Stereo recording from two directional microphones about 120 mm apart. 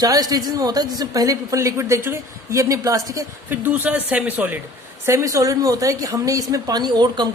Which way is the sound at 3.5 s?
15° right (ahead or behind).